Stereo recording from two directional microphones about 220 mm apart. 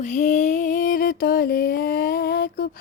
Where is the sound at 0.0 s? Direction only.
35° left (ahead or behind).